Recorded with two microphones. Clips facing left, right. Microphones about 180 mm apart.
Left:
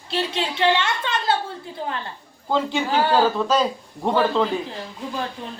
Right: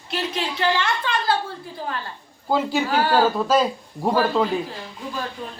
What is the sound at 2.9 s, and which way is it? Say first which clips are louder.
Speech: left 2 dB; 25° left (ahead or behind).